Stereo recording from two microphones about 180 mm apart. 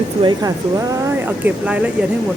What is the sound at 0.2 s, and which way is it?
Speech, 25° right (ahead or behind).